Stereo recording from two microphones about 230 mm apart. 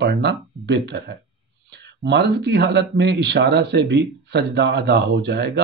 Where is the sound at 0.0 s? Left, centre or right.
Right.